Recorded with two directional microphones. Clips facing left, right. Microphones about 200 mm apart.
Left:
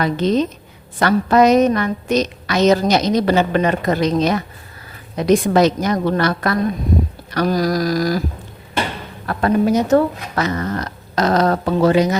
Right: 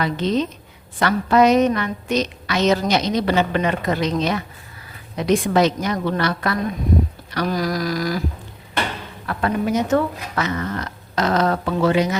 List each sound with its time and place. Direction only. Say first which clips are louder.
0.0 s a woman's voice: left 4 dB; 45° left (ahead or behind)
9.2 s a woman's voice: left 5 dB; 40° left (ahead or behind)